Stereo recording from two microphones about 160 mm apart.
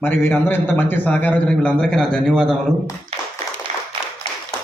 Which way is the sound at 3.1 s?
40° right (ahead or behind).